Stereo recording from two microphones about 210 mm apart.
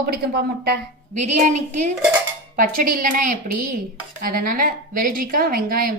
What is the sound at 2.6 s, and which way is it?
A woman's voice, 40° right (ahead or behind).